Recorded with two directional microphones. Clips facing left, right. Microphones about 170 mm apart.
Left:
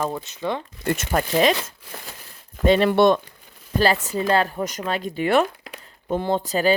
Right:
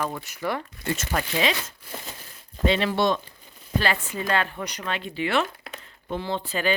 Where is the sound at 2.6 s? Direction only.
45° left (ahead or behind).